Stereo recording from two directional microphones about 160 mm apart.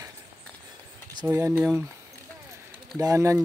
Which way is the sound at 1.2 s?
20° right (ahead or behind).